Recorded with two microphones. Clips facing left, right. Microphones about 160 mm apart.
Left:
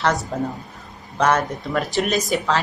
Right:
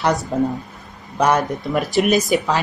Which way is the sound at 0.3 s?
10° right (ahead or behind).